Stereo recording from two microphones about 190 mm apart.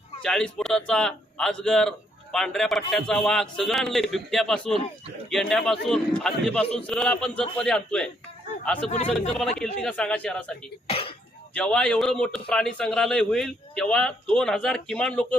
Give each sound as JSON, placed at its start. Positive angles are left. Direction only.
{"t": 0.2, "sound": "a man's voice", "side_deg": 5}
{"t": 10.8, "sound": "speech", "side_deg": 30}
{"t": 11.5, "sound": "a man's voice", "side_deg": 5}